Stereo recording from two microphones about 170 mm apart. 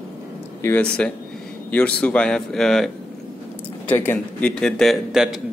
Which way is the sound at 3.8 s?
10° left (ahead or behind).